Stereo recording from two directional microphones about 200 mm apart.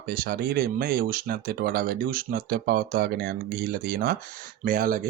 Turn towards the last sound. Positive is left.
turn(degrees=-45)  # may be behind; listen again after turning